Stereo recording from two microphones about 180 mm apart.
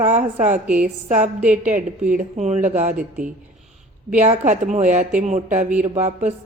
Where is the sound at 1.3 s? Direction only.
5° right (ahead or behind).